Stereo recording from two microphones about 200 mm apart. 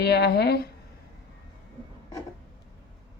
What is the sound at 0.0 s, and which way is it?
Speech, 55° left (ahead or behind).